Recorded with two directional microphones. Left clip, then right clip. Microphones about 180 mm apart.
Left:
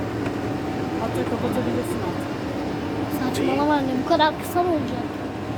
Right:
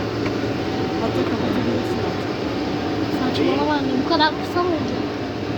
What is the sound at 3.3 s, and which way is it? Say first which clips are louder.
Speech: even; 20° left (ahead or behind).